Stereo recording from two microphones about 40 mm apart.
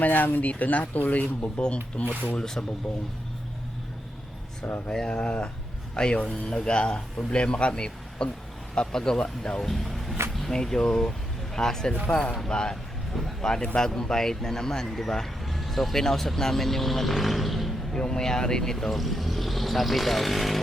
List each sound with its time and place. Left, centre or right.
0.0 s speech: left
1.6 s speech: left
2.4 s a man's voice: centre
4.9 s speech: centre
10.5 s a man's voice: centre
12.2 s speech: centre
12.5 s speech: centre
12.7 s vehicle: centre
13.4 s a man's voice: centre
17.9 s a man's voice: centre
18.9 s speech: centre